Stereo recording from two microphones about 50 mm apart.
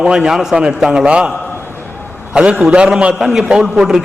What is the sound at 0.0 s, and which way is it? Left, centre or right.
A man's voice, centre.